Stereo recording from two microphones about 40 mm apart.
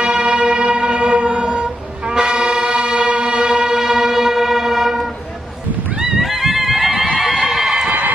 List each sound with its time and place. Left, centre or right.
0.0 s church bell: centre
1.1 s music: right; by 2.7 s centre
2.7 s a sound: right
3.1 s music: right
3.3 s music: centre
6.1 s a sound: centre